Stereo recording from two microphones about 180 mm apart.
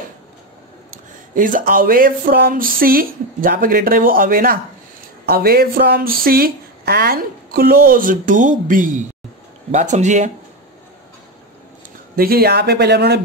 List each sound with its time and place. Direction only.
1.3 s speech: 50° right (ahead or behind)
12.2 s speech: 55° right (ahead or behind)